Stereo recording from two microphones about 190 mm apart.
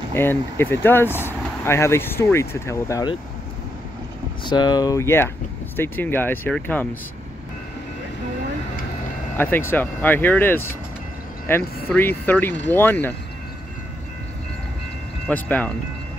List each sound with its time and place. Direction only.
0.1 s speech: 10° left (ahead or behind)
4.5 s speech: 20° left (ahead or behind)
9.4 s speech: 10° left (ahead or behind)
15.2 s speech: 10° left (ahead or behind)